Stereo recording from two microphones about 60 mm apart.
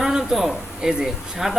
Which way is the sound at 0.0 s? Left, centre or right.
Centre.